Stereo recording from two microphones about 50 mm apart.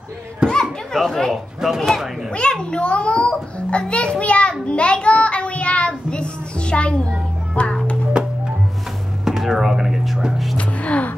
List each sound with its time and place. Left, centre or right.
0.4 s chatter: centre
0.9 s speech: centre
2.3 s a sound: centre
8.1 s music: centre
9.2 s a sound: centre
10.2 s music: centre
10.6 s gasp: left